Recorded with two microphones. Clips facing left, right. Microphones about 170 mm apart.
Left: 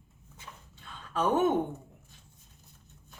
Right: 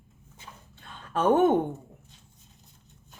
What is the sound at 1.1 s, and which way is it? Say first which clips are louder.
Speech: right 5 dB; 50° right (ahead or behind).